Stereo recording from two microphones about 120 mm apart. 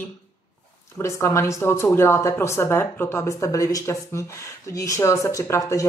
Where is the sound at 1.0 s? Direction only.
25° left (ahead or behind).